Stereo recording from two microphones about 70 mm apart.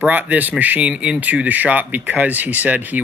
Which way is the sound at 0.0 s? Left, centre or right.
Right.